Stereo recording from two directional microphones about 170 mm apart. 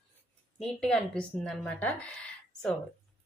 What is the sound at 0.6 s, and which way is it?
A woman's voice, 5° left (ahead or behind).